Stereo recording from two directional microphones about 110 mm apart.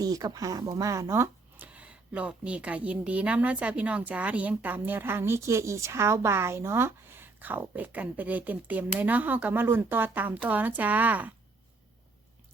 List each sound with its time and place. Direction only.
0.0 s speech: 35° right (ahead or behind)
1.6 s a woman's voice: 10° right (ahead or behind)